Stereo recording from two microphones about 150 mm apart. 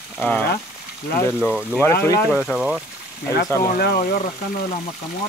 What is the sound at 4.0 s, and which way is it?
Speech, 45° left (ahead or behind).